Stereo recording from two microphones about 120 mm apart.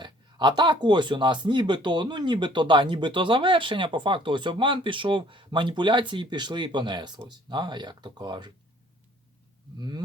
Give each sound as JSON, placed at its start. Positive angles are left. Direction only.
{"t": 0.0, "sound": "speech", "side_deg": -40}
{"t": 9.7, "sound": "speech", "side_deg": -35}